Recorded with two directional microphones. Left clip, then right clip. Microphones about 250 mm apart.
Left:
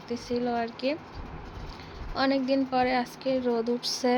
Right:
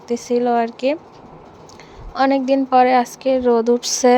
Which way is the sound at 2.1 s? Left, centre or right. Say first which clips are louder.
Right 10 dB; right.